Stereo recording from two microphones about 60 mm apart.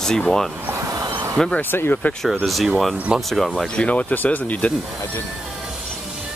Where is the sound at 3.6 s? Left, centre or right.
Centre.